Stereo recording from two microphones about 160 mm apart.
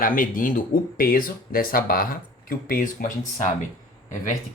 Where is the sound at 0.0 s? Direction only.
60° left (ahead or behind).